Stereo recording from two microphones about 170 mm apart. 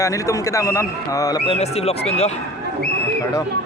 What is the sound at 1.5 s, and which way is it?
Speech, 40° left (ahead or behind).